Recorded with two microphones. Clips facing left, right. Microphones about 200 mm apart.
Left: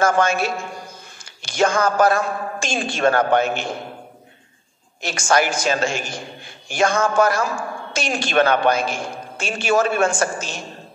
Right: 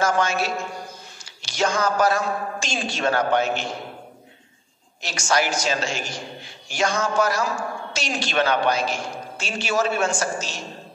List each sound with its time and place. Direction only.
0.0 s a man's voice: 55° left (ahead or behind)
5.0 s a man's voice: 55° left (ahead or behind)